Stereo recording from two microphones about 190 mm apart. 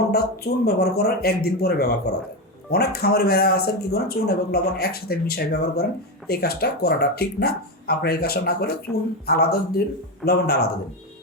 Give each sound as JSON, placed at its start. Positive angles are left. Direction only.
{"t": 0.1, "sound": "speech", "side_deg": 55}